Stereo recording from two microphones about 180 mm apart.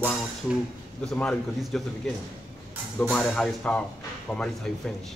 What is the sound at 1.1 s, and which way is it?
Speech, 5° left (ahead or behind).